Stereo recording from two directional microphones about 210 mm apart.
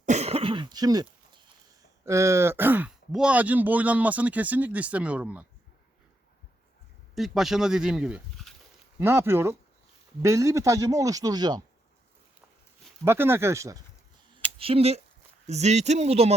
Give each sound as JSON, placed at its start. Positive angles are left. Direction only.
{"t": 0.0, "sound": "cough", "side_deg": -35}
{"t": 1.8, "sound": "speech", "side_deg": -15}
{"t": 7.2, "sound": "speech", "side_deg": 0}
{"t": 13.1, "sound": "speech", "side_deg": -10}
{"t": 14.6, "sound": "speech", "side_deg": -30}